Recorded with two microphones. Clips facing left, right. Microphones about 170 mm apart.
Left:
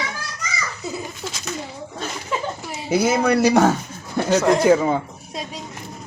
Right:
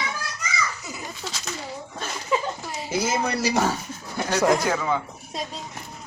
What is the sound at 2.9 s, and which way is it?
Speech, 60° left (ahead or behind).